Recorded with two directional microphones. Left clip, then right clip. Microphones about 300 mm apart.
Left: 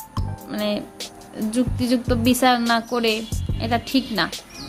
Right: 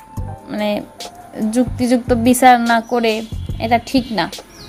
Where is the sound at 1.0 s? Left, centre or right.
Centre.